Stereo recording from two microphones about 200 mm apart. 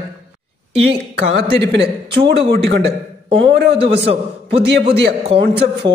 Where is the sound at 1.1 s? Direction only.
60° right (ahead or behind).